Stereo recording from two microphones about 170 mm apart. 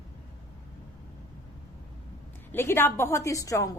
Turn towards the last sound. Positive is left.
turn(degrees=20)  # may be behind; listen again after turning